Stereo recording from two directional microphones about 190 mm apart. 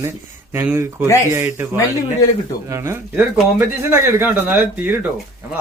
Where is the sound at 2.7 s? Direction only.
15° right (ahead or behind).